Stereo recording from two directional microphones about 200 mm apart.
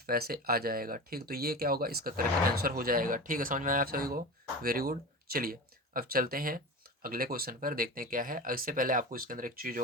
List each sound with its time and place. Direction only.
0.0 s speech: 50° right (ahead or behind)